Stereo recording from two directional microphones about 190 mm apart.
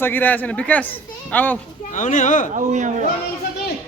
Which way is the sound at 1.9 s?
40° left (ahead or behind).